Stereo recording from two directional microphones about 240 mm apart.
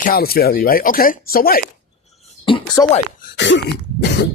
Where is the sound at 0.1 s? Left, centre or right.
Left.